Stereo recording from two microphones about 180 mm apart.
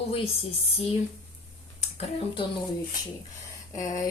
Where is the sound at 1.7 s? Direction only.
35° left (ahead or behind).